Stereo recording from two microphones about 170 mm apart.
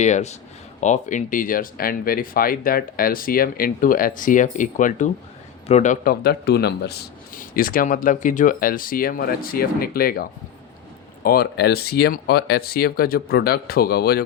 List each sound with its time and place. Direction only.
0.0 s a man's voice: 40° left (ahead or behind)
6.2 s speech: 70° left (ahead or behind)